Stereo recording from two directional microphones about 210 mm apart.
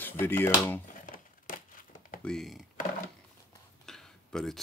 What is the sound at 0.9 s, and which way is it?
Crushing, 40° left (ahead or behind).